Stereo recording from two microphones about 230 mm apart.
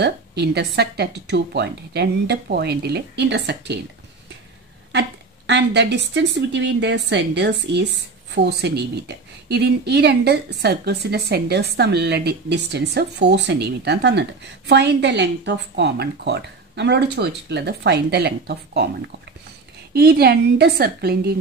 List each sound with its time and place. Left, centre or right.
0.0 s a woman's voice: right
5.5 s a woman's voice: right